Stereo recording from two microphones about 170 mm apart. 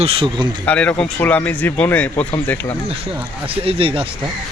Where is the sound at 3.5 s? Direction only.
35° right (ahead or behind).